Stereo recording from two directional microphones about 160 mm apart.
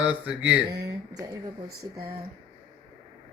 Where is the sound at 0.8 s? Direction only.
20° right (ahead or behind).